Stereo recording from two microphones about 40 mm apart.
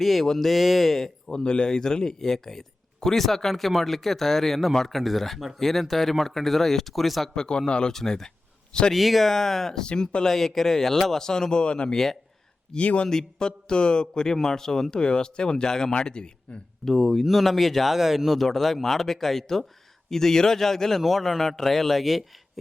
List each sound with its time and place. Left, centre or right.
0.0 s speech: centre
1.5 s speech: left; by 7.3 s centre
7.3 s speech: centre
8.9 s speech: centre; by 10.2 s left
10.2 s speech: centre; by 13.1 s left
13.1 s speech: centre
16.8 s speech: centre
18.3 s speech: centre